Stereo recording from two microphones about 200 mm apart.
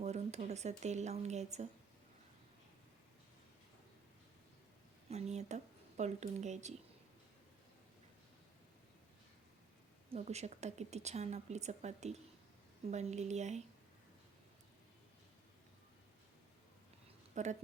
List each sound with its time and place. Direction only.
0.0 s a woman's voice: 35° right (ahead or behind)
5.0 s a woman's voice: 35° right (ahead or behind)
10.1 s a woman's voice: 35° right (ahead or behind)
17.3 s speech: 35° right (ahead or behind)